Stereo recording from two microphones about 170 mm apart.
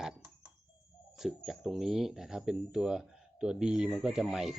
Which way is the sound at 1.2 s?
Centre (ahead or behind).